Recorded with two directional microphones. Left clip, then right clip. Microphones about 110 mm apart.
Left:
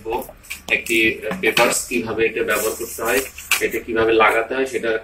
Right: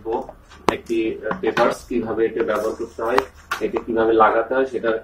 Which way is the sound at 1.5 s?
20° left (ahead or behind).